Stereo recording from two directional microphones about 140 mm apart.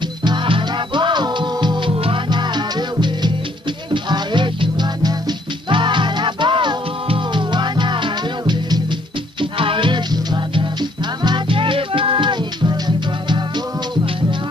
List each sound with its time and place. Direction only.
0.2 s music: 35° right (ahead or behind)